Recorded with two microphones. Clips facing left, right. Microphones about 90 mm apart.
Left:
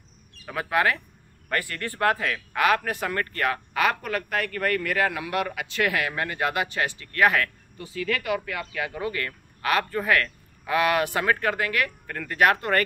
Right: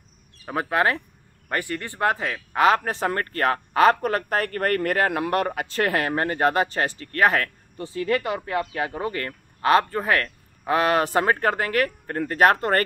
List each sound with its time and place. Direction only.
0.5 s speech: 30° right (ahead or behind)
1.5 s speech: 20° right (ahead or behind); by 12.8 s 40° right (ahead or behind)